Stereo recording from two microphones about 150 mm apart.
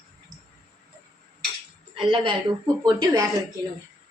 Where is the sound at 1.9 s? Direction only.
35° right (ahead or behind).